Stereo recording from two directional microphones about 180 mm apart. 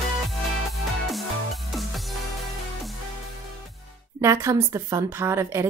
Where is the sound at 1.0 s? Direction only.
Centre (ahead or behind).